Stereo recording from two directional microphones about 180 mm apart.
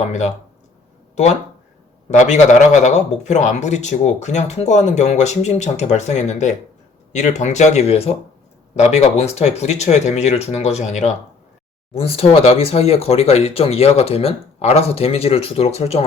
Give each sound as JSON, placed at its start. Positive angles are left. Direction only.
{"t": 0.1, "sound": "a man's voice", "side_deg": 40}